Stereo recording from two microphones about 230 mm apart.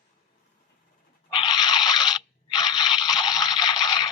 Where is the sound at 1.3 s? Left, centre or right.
Centre.